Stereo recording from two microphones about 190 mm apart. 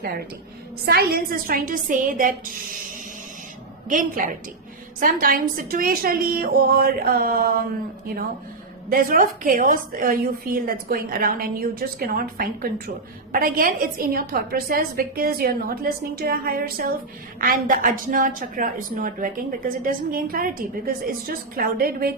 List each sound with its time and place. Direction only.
0.9 s a woman's voice: 55° right (ahead or behind)
3.8 s a woman's voice: 45° right (ahead or behind)
8.9 s a woman's voice: 50° right (ahead or behind)